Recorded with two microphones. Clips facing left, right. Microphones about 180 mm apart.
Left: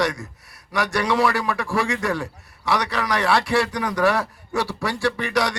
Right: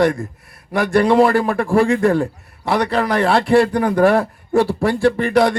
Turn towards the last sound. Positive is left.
turn(degrees=-55)  # may be behind; listen again after turning